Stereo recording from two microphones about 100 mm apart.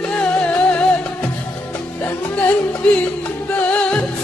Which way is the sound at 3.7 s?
10° left (ahead or behind).